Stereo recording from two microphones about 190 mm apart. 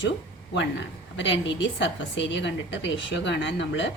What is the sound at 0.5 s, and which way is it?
A woman's voice, 70° left (ahead or behind).